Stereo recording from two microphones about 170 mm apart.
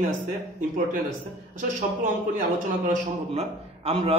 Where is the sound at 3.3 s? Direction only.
40° right (ahead or behind).